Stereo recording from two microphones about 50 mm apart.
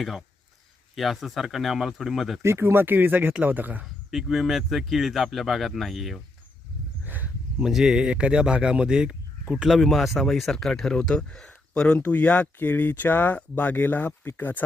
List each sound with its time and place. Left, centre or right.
0.0 s speech: centre
2.4 s speech: right
2.8 s speech: right
3.8 s speech: centre
7.0 s a sound: right
7.6 s speech: centre
8.0 s speech: right
9.5 s speech: centre
11.9 s speech: left
12.5 s speech: left